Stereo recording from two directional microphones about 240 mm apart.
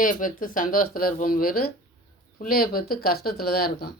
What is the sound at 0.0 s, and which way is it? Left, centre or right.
Speech, left.